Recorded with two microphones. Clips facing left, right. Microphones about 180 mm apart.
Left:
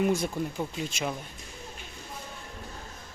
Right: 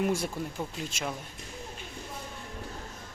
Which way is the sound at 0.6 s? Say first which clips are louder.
Left 3 dB; centre (ahead or behind).